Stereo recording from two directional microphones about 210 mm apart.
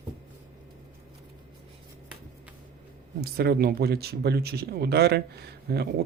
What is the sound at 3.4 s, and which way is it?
Speech, 50° right (ahead or behind).